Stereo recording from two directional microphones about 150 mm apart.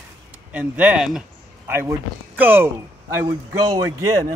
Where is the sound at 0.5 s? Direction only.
10° right (ahead or behind).